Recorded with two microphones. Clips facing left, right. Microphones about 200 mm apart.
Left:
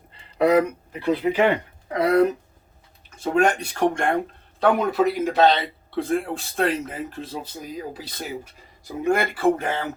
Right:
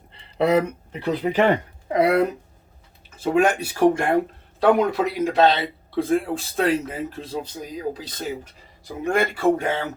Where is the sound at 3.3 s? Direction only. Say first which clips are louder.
Right 1 dB; 5° right (ahead or behind).